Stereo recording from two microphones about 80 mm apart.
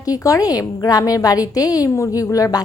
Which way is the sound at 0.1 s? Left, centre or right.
Left.